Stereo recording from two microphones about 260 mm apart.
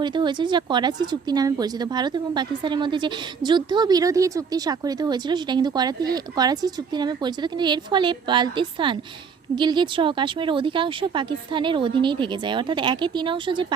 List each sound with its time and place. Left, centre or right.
0.0 s a woman's voice: centre